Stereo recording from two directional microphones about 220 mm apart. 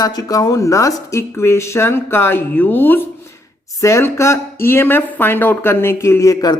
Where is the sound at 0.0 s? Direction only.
15° left (ahead or behind).